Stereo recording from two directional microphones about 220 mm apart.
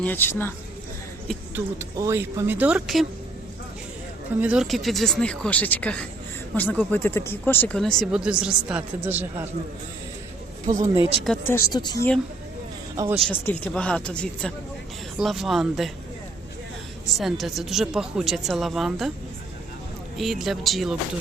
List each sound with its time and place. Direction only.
0.0 s speech: 10° left (ahead or behind)
1.5 s speech: 10° right (ahead or behind)
4.4 s speech: 5° right (ahead or behind)
10.7 s speech: 15° right (ahead or behind)
11.2 s speech: 5° left (ahead or behind)
13.2 s speech: 5° left (ahead or behind)
17.1 s speech: centre (ahead or behind)
20.1 s speech: centre (ahead or behind)